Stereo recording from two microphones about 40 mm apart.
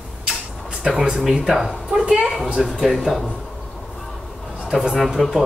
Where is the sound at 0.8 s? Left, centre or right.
Centre.